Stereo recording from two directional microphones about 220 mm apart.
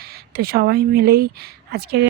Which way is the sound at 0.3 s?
45° right (ahead or behind).